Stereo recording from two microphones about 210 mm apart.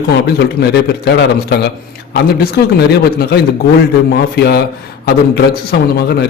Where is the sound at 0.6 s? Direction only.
50° left (ahead or behind).